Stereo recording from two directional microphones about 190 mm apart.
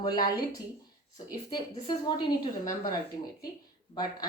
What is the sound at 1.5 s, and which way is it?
A woman's voice, 20° left (ahead or behind).